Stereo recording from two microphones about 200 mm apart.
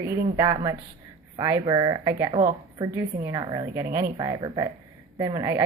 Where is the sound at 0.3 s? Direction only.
20° right (ahead or behind).